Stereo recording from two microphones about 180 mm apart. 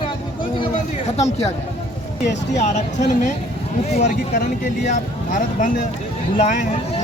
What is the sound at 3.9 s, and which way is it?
Speech, 40° left (ahead or behind).